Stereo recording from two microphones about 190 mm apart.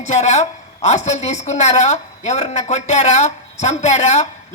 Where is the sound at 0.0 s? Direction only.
40° left (ahead or behind).